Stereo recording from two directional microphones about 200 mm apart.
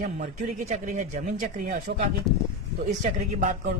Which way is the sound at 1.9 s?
45° right (ahead or behind).